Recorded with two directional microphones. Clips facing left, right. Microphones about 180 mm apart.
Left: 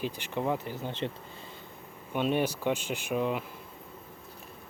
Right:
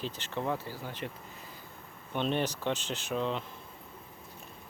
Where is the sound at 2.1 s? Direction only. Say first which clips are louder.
Left 3 dB; 10° left (ahead or behind).